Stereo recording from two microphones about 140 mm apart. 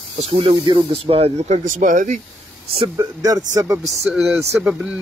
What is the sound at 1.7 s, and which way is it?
Speech, 70° right (ahead or behind).